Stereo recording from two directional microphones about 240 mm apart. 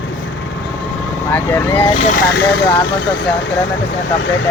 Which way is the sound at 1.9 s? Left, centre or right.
Left.